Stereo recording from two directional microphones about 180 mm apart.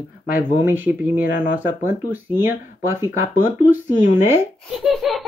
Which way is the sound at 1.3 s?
50° left (ahead or behind).